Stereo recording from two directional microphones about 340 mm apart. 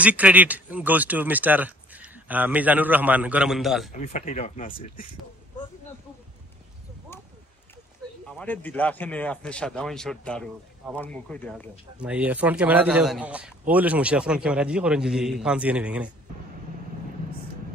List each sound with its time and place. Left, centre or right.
0.0 s a man's voice: centre
4.0 s speech: centre
8.3 s a man's voice: centre